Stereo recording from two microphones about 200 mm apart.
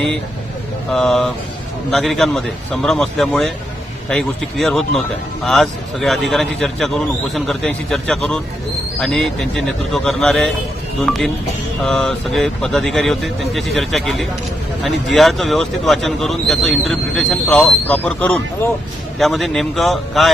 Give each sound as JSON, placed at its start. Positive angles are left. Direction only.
{"t": 0.9, "sound": "speech", "side_deg": 5}